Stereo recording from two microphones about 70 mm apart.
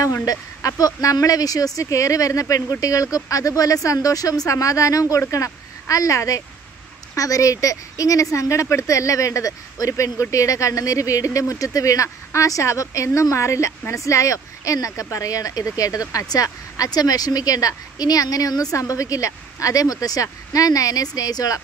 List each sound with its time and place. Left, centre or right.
0.0 s speech: left